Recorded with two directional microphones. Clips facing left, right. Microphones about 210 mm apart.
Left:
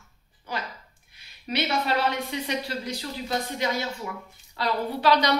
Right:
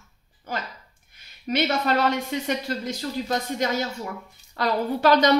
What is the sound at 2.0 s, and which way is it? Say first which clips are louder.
Speech: right 4 dB; 45° right (ahead or behind).